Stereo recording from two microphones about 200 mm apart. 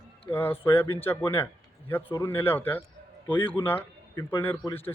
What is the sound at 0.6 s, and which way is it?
Speech, 10° left (ahead or behind).